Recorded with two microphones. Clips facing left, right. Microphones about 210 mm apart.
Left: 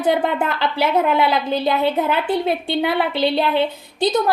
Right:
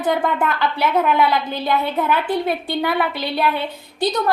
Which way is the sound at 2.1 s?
25° left (ahead or behind).